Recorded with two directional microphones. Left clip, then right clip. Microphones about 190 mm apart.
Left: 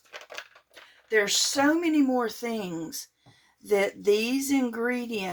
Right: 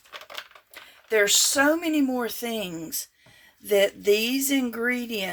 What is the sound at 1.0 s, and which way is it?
Speech, 50° right (ahead or behind).